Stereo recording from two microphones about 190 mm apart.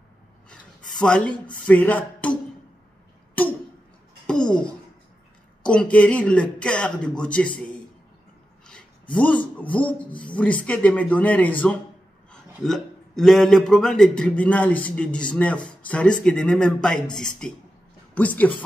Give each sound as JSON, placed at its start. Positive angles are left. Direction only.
{"t": 0.5, "sound": "speech", "side_deg": 5}
{"t": 3.4, "sound": "a sound", "side_deg": 10}
{"t": 5.6, "sound": "a man's voice", "side_deg": 5}
{"t": 9.1, "sound": "a man's voice", "side_deg": 5}